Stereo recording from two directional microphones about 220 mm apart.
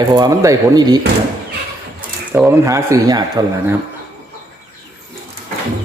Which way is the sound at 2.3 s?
10° right (ahead or behind).